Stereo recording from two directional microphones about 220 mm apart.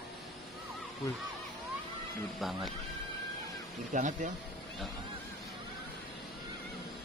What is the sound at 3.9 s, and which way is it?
Speech, 35° right (ahead or behind).